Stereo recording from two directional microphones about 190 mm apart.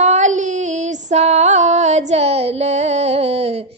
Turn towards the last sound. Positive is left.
turn(degrees=-30)  # may be behind; listen again after turning